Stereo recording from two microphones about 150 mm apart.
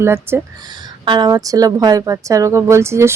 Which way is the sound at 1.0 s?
30° right (ahead or behind).